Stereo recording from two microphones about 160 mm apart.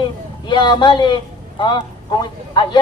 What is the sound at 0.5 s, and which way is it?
A woman's voice, 30° left (ahead or behind).